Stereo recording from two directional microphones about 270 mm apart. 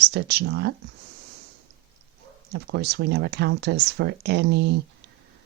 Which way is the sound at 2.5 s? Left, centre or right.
Right.